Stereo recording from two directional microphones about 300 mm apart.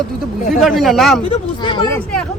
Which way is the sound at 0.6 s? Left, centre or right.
Centre.